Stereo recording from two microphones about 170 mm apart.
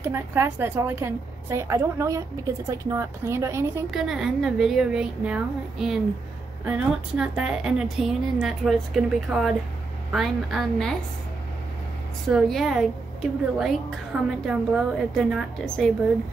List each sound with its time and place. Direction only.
0.0 s a woman's voice: 15° right (ahead or behind)
3.9 s a woman's voice: centre (ahead or behind)
12.3 s a woman's voice: centre (ahead or behind)